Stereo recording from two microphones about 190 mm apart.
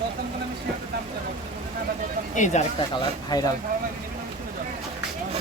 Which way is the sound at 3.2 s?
20° left (ahead or behind).